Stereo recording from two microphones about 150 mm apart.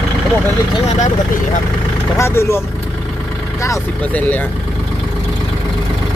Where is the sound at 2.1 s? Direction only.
20° left (ahead or behind).